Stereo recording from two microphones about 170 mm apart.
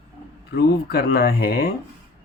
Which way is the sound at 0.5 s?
65° left (ahead or behind).